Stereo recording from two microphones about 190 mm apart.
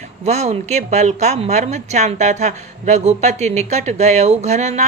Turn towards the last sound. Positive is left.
turn(degrees=-35)  # may be behind; listen again after turning